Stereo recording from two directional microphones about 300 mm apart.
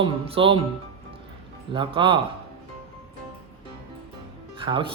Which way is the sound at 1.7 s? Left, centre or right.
Centre.